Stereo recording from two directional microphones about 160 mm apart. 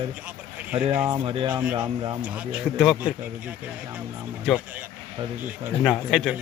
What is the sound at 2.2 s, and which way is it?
Speech, 10° right (ahead or behind).